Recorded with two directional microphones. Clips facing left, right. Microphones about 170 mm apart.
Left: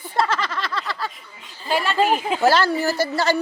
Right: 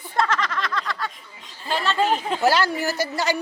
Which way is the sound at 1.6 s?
10° left (ahead or behind).